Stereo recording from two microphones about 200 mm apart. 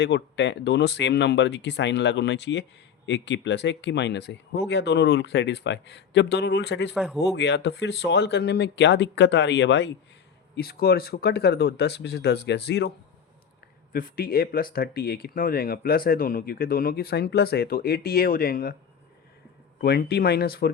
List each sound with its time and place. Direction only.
0.0 s speech: 60° left (ahead or behind)
6.9 s speech: centre (ahead or behind)
7.3 s speech: 60° left (ahead or behind)
10.5 s speech: 50° left (ahead or behind)
13.9 s speech: 45° left (ahead or behind)
19.8 s speech: 50° left (ahead or behind)